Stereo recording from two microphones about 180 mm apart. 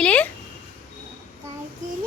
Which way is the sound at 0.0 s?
5° left (ahead or behind).